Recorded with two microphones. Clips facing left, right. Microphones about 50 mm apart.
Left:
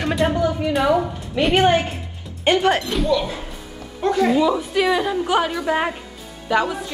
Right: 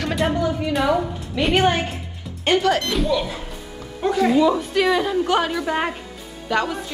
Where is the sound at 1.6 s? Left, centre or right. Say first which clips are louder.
Left 3 dB; left.